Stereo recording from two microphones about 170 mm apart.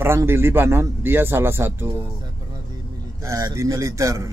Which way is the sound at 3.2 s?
20° right (ahead or behind).